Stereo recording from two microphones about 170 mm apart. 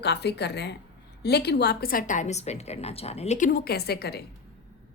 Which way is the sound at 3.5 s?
65° left (ahead or behind).